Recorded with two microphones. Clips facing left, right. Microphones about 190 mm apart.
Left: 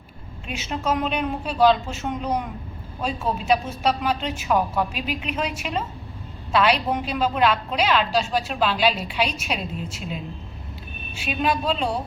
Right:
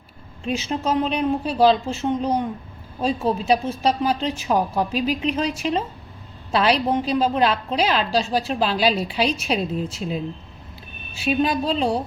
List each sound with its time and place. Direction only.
0.4 s speech: 35° right (ahead or behind)
11.2 s speech: 35° right (ahead or behind)